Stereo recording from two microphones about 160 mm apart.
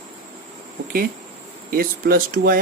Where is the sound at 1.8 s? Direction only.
65° right (ahead or behind).